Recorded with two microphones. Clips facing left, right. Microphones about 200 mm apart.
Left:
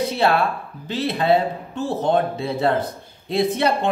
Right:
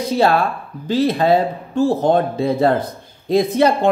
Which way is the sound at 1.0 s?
40° right (ahead or behind).